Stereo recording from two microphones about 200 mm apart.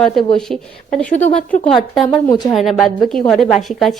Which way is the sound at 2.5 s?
Centre (ahead or behind).